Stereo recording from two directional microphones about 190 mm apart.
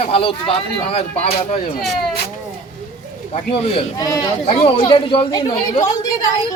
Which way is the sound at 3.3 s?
35° left (ahead or behind).